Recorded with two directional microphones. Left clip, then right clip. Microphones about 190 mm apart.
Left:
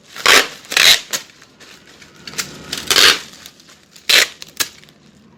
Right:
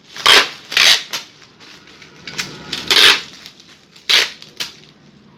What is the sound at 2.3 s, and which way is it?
Cash register, 50° left (ahead or behind).